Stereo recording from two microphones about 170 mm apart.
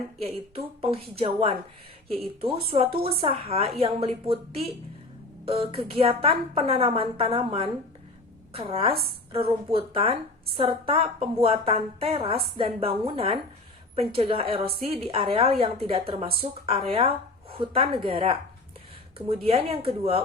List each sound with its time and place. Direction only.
0.2 s speech: 35° right (ahead or behind)
19.5 s speech: 35° right (ahead or behind)